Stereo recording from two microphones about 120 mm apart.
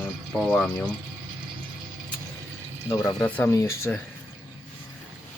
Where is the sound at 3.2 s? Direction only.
15° left (ahead or behind).